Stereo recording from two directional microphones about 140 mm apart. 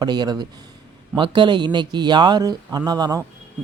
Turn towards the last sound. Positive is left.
turn(degrees=-30)  # may be behind; listen again after turning